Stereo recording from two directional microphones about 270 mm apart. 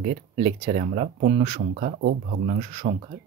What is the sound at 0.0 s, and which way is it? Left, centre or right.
Speech, right.